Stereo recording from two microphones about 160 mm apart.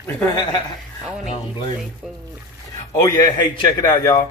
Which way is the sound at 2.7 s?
20° left (ahead or behind).